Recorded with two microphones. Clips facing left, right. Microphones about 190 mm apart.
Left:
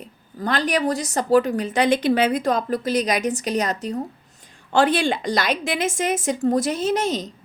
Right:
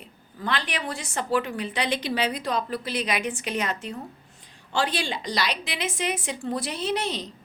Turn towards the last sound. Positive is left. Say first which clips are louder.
# left 6 dB
turn(degrees=45)  # may be behind; listen again after turning